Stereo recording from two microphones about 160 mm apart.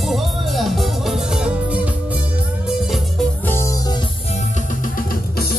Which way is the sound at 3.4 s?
15° left (ahead or behind).